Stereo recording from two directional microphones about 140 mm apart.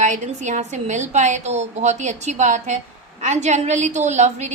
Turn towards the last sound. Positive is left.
turn(degrees=-55)  # may be behind; listen again after turning